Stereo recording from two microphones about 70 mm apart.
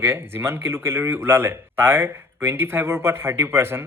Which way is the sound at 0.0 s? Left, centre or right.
Right.